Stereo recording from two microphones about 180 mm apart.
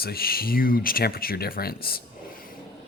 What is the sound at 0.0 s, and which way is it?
Speech, 55° left (ahead or behind).